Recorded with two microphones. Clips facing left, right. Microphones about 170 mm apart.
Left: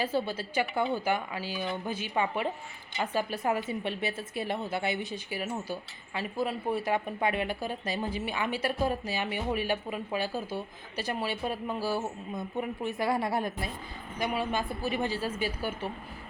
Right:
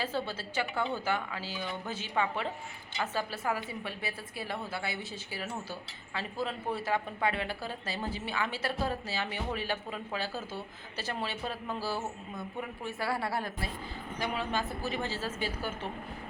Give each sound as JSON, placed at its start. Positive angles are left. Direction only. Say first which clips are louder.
{"t": 0.0, "sound": "a woman's voice", "louder": "left 4 dB", "side_deg": 15}